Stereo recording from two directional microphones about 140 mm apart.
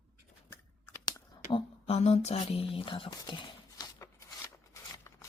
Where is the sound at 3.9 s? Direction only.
20° left (ahead or behind).